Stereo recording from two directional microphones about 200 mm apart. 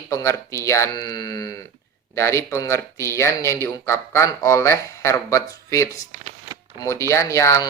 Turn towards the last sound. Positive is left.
turn(degrees=15)  # may be behind; listen again after turning